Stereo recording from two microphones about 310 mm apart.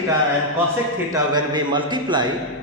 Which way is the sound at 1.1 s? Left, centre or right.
Centre.